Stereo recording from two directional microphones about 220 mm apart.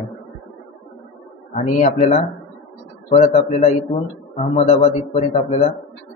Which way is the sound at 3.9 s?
20° left (ahead or behind).